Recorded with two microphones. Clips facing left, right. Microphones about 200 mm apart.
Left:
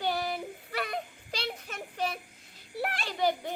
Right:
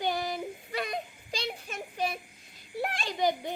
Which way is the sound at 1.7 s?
10° right (ahead or behind).